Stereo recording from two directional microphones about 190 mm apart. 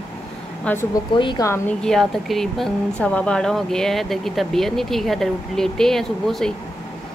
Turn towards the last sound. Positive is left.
turn(degrees=0)  # may be behind; listen again after turning